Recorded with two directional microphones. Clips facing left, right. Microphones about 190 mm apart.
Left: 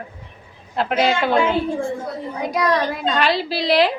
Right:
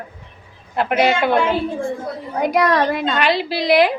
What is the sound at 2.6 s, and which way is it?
Speech, 60° right (ahead or behind).